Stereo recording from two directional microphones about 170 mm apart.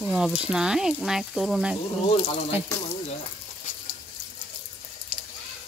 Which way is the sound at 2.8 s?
40° left (ahead or behind).